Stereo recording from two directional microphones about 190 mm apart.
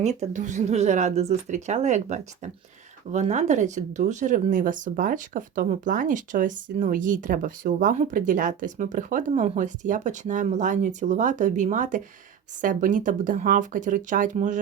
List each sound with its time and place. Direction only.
0.0 s speech: 35° right (ahead or behind)